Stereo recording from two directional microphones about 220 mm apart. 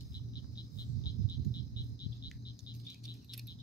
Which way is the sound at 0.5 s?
15° left (ahead or behind).